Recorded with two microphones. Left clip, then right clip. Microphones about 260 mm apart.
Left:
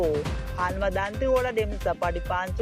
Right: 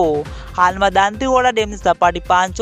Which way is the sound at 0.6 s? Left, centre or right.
Right.